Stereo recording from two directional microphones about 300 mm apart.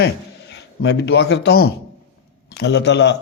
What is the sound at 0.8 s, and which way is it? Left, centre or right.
A man's voice, left.